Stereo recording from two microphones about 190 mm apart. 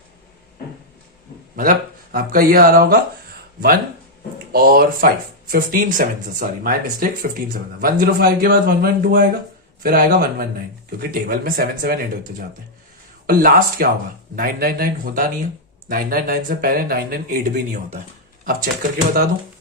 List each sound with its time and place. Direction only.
2.1 s speech: 50° right (ahead or behind)
4.5 s speech: 50° right (ahead or behind)
13.2 s speech: 50° right (ahead or behind)